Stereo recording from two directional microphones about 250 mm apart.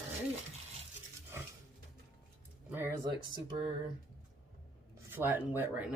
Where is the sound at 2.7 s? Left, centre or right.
Centre.